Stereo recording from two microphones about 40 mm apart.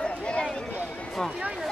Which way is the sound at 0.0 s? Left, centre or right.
Left.